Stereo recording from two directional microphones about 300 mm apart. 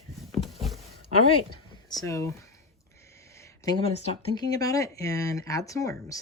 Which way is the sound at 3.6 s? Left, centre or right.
Centre.